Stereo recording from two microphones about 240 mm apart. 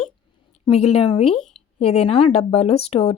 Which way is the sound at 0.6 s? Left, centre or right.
Left.